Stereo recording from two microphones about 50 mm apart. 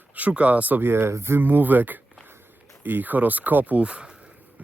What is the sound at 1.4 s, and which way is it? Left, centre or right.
Speech, right.